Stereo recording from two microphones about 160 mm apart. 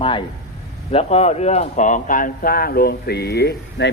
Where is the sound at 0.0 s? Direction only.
30° left (ahead or behind).